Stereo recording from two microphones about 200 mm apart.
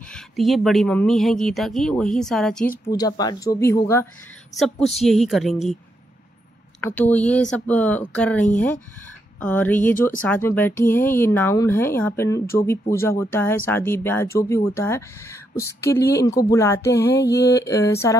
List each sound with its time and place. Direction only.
0.1 s speech: centre (ahead or behind)
2.8 s speech: 20° left (ahead or behind)
4.6 s speech: centre (ahead or behind)
7.0 s speech: 5° left (ahead or behind)